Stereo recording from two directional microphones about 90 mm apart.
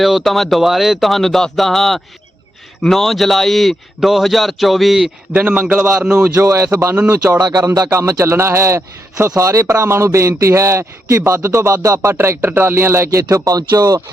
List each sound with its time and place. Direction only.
0.0 s a man's voice: centre (ahead or behind)
5.3 s a man's voice: 15° right (ahead or behind)
6.3 s speech: 30° right (ahead or behind)
6.9 s a man's voice: 15° right (ahead or behind)
7.3 s speech: 45° right (ahead or behind)
7.9 s a man's voice: 30° right (ahead or behind)